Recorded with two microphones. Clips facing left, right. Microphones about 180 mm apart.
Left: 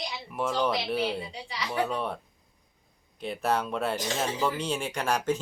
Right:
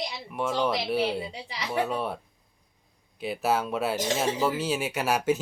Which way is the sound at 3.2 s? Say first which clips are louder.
Right 2 dB; 5° right (ahead or behind).